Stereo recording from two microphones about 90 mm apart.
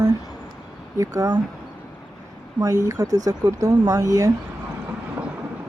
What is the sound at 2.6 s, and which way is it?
Speech, 40° right (ahead or behind).